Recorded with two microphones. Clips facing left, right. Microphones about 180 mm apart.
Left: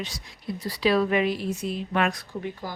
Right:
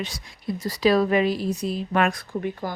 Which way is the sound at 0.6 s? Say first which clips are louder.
Right 3 dB; 40° right (ahead or behind).